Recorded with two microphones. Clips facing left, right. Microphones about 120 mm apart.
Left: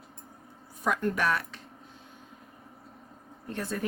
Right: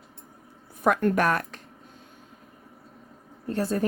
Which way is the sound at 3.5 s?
35° right (ahead or behind).